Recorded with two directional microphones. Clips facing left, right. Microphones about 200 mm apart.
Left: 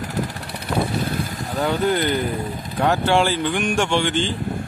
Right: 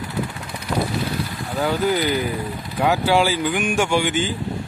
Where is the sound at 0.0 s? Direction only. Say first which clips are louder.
Left 1 dB; 40° left (ahead or behind).